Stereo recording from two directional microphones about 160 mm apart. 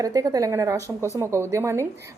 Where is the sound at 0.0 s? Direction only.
25° right (ahead or behind).